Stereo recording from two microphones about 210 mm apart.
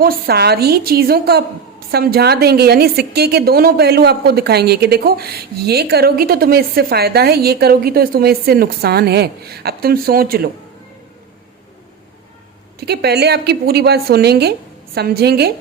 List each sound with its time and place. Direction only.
0.0 s a woman's voice: 45° right (ahead or behind)
12.8 s a woman's voice: 50° right (ahead or behind)